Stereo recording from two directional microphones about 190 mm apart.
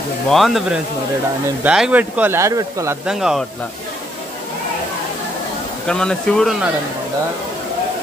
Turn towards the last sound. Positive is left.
turn(degrees=5)  # may be behind; listen again after turning